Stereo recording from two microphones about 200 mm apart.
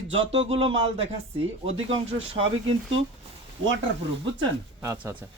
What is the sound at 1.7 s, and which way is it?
Speech, 75° right (ahead or behind).